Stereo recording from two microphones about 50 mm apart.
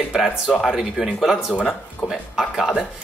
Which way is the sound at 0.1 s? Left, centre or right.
Centre.